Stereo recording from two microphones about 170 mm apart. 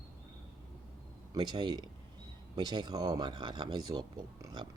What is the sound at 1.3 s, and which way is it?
Speech, 25° right (ahead or behind).